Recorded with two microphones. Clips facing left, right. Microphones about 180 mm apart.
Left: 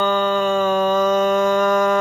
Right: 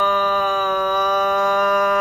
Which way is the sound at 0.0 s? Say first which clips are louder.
Left 2 dB; 25° left (ahead or behind).